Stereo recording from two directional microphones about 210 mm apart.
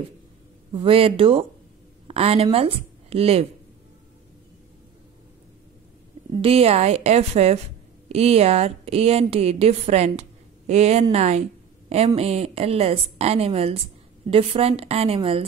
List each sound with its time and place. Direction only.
0.8 s a woman's voice: 25° right (ahead or behind)
6.4 s a woman's voice: 30° right (ahead or behind)